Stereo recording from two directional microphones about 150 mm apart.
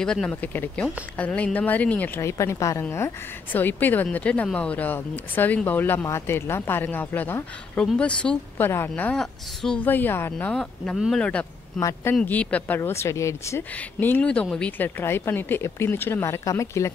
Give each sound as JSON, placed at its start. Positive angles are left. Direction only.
{"t": 0.0, "sound": "speech", "side_deg": 5}
{"t": 10.5, "sound": "speech", "side_deg": 5}
{"t": 11.8, "sound": "speech", "side_deg": 15}